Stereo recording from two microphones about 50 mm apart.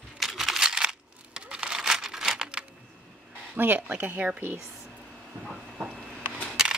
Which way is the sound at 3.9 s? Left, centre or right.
Right.